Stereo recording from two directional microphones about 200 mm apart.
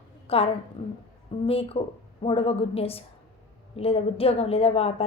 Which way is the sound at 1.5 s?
30° left (ahead or behind).